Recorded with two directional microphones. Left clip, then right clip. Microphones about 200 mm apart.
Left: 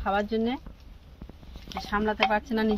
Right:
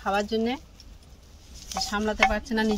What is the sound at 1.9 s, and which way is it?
Speech, 50° right (ahead or behind).